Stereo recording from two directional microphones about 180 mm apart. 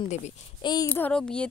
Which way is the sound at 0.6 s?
25° left (ahead or behind).